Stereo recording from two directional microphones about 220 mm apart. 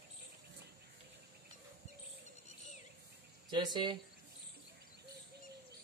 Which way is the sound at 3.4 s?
20° right (ahead or behind).